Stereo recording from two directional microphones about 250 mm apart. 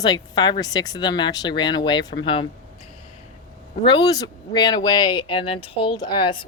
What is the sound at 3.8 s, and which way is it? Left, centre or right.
Speech, centre.